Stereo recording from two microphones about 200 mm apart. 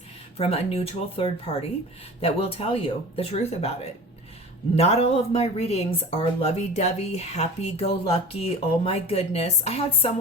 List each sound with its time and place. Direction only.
0.3 s speech: 30° left (ahead or behind)
4.7 s speech: 30° left (ahead or behind)